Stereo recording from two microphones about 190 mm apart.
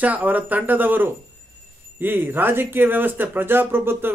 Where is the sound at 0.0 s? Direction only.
10° right (ahead or behind).